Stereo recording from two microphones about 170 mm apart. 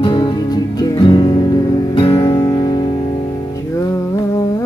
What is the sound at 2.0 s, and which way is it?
Guitar, 30° left (ahead or behind).